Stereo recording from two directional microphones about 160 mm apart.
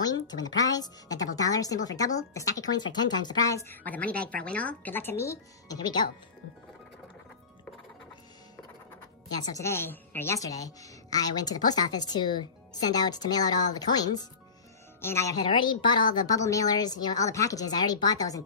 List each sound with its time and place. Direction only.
0.0 s a woman's voice: 25° left (ahead or behind)
9.4 s a woman's voice: 20° left (ahead or behind)